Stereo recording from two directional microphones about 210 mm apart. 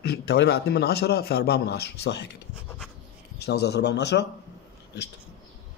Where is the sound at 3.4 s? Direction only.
50° left (ahead or behind).